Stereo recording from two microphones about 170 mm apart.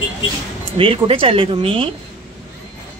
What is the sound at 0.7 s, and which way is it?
Speech, 30° right (ahead or behind).